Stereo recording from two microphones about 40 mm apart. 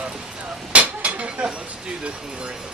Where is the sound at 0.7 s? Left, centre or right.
Right.